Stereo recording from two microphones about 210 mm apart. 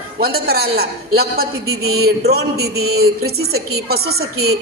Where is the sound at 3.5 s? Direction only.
50° right (ahead or behind).